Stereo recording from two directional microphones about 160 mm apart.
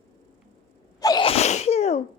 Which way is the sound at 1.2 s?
40° left (ahead or behind).